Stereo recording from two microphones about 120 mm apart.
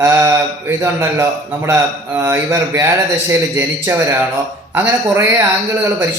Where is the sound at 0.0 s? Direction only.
20° right (ahead or behind).